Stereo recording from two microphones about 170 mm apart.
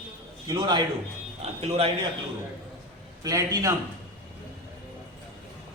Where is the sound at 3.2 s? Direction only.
20° right (ahead or behind).